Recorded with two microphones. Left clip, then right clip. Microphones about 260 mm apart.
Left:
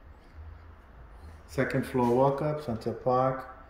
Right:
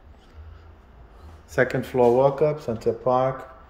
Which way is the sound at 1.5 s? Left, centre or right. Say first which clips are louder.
Right 7 dB; centre.